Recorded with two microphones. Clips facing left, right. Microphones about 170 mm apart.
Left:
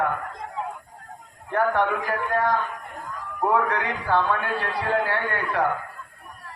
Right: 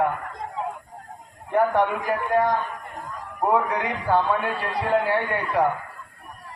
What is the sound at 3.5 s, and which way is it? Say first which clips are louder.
A man's voice: right 1 dB; 20° right (ahead or behind).